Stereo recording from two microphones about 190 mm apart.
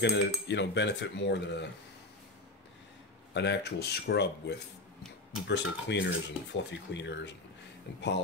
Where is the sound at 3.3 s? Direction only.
60° left (ahead or behind).